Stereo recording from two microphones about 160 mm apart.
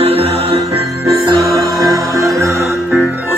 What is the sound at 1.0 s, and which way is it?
Music, 20° right (ahead or behind).